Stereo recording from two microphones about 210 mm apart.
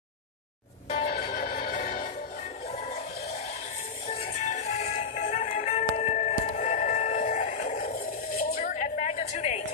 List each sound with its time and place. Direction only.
0.9 s music: 35° left (ahead or behind)
4.1 s music: 30° left (ahead or behind)
7.9 s a sound: 45° left (ahead or behind)